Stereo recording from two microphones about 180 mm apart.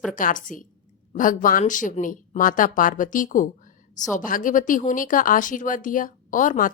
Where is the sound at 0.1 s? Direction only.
50° left (ahead or behind).